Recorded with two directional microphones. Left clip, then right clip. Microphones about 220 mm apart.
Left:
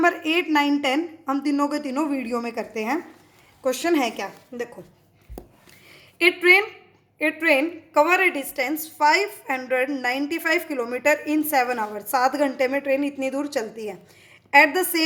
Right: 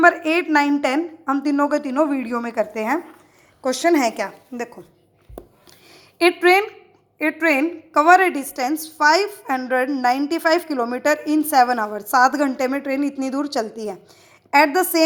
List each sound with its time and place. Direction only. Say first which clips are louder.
0.0 s a woman's voice: right 5 dB; 10° right (ahead or behind)
6.4 s a woman's voice: right 1 dB; 15° right (ahead or behind)